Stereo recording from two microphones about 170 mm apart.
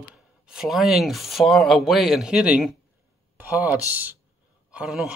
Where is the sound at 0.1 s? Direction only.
5° right (ahead or behind).